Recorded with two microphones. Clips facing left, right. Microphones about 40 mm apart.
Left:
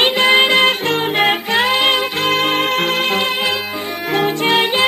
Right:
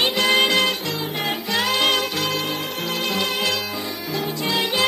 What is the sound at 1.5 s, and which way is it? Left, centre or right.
Music, left.